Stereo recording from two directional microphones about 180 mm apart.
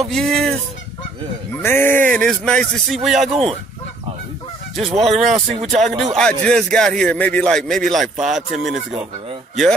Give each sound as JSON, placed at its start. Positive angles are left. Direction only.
{"t": 0.1, "sound": "a man's voice", "side_deg": 0}
{"t": 4.7, "sound": "a man's voice", "side_deg": 0}